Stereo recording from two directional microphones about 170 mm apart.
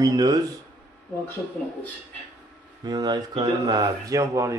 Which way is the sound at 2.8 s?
25° right (ahead or behind).